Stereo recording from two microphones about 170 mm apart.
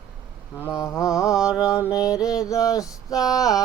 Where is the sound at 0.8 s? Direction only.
20° left (ahead or behind).